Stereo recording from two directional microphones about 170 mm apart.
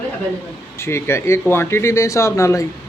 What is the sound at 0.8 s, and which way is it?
Speech, 15° left (ahead or behind).